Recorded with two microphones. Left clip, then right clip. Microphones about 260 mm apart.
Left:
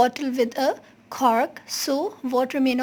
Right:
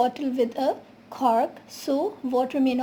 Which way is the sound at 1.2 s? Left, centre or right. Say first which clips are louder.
Left 2 dB; left.